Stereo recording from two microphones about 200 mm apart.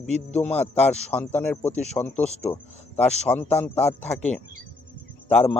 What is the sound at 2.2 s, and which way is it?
Speech, 35° left (ahead or behind).